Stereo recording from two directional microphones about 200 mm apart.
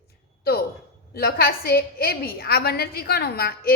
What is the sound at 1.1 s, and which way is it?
A woman's voice, 50° left (ahead or behind).